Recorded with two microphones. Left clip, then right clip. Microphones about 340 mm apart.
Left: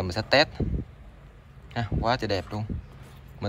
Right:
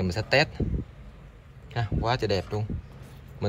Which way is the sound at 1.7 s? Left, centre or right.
Centre.